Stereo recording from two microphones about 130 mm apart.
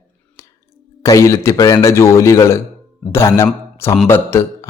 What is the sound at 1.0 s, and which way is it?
A man's voice, 25° left (ahead or behind).